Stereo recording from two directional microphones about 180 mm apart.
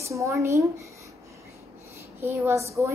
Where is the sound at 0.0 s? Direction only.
15° right (ahead or behind).